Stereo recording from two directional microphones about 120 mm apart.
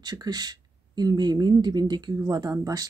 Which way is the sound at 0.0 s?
35° right (ahead or behind).